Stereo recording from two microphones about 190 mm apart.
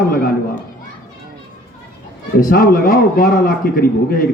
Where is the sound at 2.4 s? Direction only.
50° left (ahead or behind).